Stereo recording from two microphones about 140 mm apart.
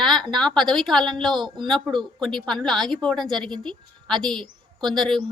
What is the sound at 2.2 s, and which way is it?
A woman's voice, 5° left (ahead or behind).